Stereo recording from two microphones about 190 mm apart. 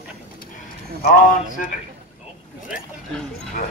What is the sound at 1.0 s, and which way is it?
Speech, 55° left (ahead or behind).